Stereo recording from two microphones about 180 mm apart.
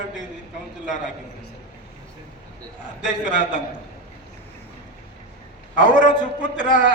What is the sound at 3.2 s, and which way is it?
Speech, 45° left (ahead or behind).